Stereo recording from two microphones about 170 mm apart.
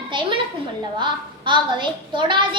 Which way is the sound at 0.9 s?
30° right (ahead or behind).